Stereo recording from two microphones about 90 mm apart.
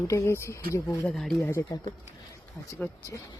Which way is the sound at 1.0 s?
5° left (ahead or behind).